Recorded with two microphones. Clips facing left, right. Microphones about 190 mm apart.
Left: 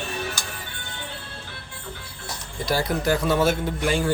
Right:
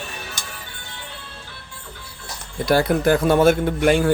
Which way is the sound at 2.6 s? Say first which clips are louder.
Right 6 dB; 60° right (ahead or behind).